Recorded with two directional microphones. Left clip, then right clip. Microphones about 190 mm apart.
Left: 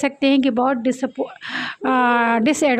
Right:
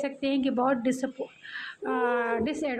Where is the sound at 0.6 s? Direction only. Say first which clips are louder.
Left 7 dB; 30° left (ahead or behind).